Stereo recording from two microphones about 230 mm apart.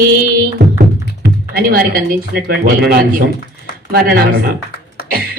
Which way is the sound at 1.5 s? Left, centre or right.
Right.